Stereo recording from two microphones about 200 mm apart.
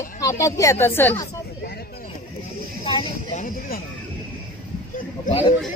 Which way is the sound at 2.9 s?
25° left (ahead or behind).